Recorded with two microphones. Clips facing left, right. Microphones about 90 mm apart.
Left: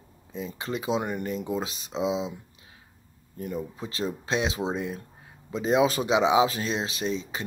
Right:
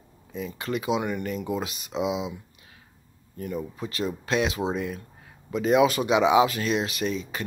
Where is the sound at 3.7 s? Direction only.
30° left (ahead or behind).